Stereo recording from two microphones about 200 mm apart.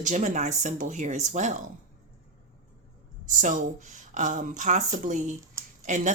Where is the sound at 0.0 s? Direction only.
40° right (ahead or behind).